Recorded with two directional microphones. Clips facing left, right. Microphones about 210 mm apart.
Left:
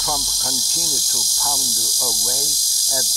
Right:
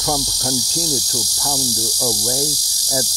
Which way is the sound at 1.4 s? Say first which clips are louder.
Right 6 dB; 40° right (ahead or behind).